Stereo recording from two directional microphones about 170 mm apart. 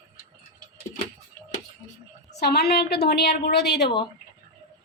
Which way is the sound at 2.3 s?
75° left (ahead or behind).